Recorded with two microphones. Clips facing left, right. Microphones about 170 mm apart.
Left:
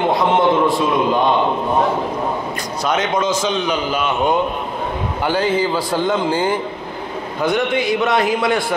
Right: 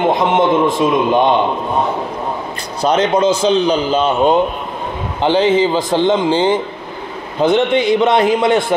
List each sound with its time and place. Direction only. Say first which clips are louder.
0.2 s a man's voice: right 2 dB; 20° right (ahead or behind)
2.8 s a man's voice: right 6 dB; 30° right (ahead or behind)